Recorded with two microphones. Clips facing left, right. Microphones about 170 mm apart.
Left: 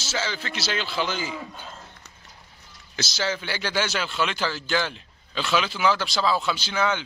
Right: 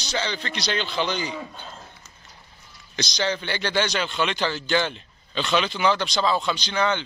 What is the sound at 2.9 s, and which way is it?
Speech, 5° left (ahead or behind).